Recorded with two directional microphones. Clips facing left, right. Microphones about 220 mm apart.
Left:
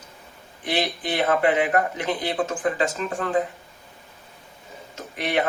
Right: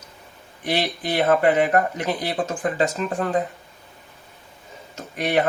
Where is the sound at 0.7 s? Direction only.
45° right (ahead or behind).